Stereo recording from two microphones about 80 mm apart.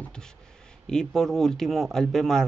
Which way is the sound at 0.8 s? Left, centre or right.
Centre.